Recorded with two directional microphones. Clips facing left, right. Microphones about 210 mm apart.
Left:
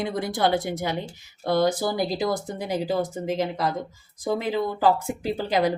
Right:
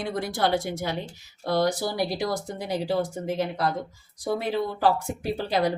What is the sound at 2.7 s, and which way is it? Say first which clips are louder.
Speech: left 1 dB; 20° left (ahead or behind).